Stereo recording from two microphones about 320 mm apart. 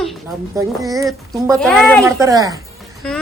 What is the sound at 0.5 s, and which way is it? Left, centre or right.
Speech, centre.